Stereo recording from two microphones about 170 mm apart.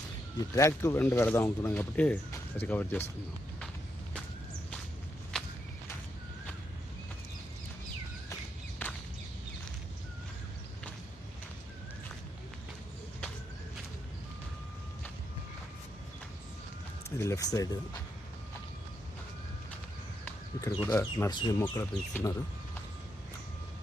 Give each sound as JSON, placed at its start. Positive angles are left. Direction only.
{"t": 0.5, "sound": "speech", "side_deg": 20}
{"t": 5.3, "sound": "walk", "side_deg": 5}
{"t": 8.8, "sound": "whip", "side_deg": 10}
{"t": 17.2, "sound": "speech", "side_deg": 20}
{"t": 20.2, "sound": "a sound", "side_deg": 15}
{"t": 20.9, "sound": "speech", "side_deg": 15}